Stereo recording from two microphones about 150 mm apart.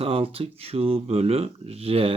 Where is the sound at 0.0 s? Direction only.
40° right (ahead or behind).